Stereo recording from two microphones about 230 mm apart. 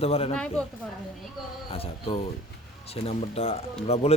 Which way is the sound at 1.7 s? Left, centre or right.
Left.